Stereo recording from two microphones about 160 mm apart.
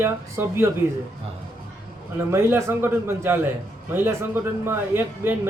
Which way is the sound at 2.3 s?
15° right (ahead or behind).